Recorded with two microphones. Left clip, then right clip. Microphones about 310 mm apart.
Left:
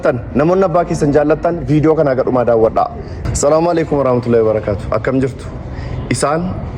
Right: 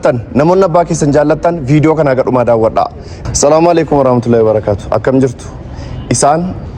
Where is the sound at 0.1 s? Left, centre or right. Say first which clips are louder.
Right 4 dB; right.